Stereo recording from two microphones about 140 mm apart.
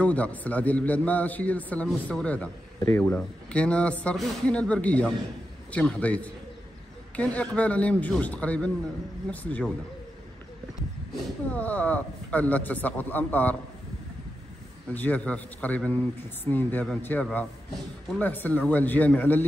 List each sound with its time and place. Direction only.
0.0 s a man's voice: 10° left (ahead or behind)
3.2 s a man's voice: 10° left (ahead or behind)
11.5 s a man's voice: 10° left (ahead or behind)
15.0 s a man's voice: 10° left (ahead or behind)